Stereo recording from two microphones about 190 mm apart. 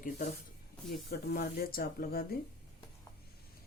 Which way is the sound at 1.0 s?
55° left (ahead or behind).